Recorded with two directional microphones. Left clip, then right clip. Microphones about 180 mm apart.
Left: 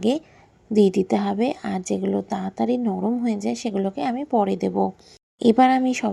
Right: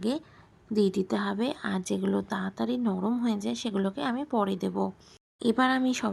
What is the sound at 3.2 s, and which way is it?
A woman's voice, 10° left (ahead or behind).